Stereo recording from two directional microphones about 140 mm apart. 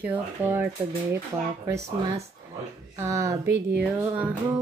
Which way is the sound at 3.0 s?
20° right (ahead or behind).